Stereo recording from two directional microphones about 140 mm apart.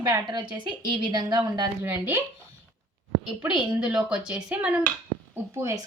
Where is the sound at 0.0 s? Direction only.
30° right (ahead or behind).